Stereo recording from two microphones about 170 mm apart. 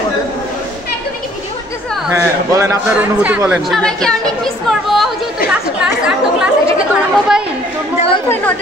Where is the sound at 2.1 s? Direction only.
15° right (ahead or behind).